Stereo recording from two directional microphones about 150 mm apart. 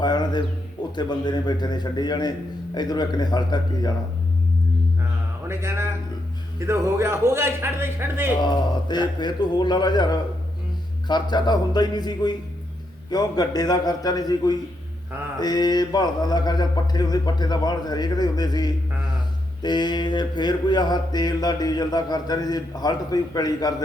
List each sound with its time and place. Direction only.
0.0 s a sound: 30° left (ahead or behind)
0.9 s mantra: 30° left (ahead or behind)
5.5 s a man's voice: 15° right (ahead or behind)
8.4 s mantra: 30° left (ahead or behind)